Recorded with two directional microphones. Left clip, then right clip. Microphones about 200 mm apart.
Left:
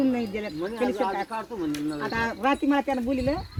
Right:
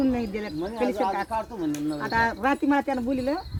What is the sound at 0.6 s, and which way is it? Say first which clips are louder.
Speech: right 1 dB; 35° right (ahead or behind).